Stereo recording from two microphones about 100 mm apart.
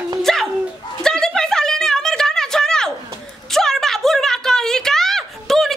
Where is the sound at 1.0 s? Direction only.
5° left (ahead or behind).